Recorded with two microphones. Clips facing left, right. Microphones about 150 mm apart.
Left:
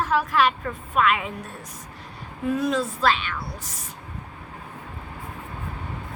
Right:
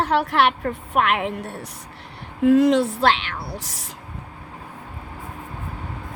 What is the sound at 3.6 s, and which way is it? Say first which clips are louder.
Speech: right 2 dB; 80° right.